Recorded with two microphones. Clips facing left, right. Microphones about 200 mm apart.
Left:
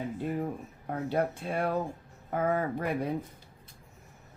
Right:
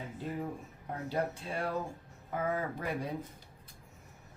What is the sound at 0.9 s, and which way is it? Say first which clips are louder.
Speech: left 5 dB; 55° left (ahead or behind).